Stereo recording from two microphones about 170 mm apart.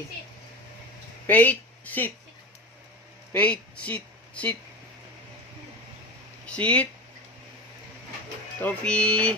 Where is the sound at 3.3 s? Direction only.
10° left (ahead or behind).